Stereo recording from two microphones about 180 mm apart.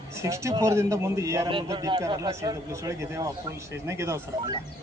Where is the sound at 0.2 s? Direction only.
15° right (ahead or behind).